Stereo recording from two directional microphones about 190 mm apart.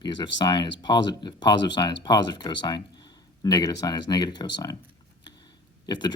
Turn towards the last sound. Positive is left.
turn(degrees=20)  # may be behind; listen again after turning